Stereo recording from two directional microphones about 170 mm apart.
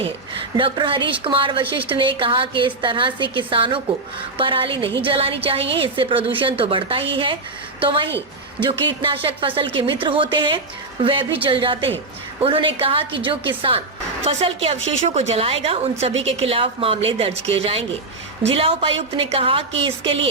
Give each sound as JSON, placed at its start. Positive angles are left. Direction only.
{"t": 0.5, "sound": "a woman's voice", "side_deg": -30}